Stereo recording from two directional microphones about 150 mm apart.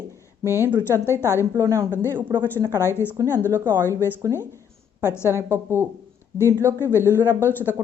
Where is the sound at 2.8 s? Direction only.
15° left (ahead or behind).